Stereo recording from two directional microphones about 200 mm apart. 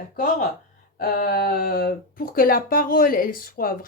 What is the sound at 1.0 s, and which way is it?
Speech, 50° left (ahead or behind).